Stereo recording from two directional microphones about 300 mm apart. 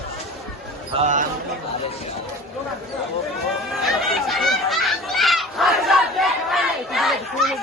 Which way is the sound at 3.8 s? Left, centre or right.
Centre.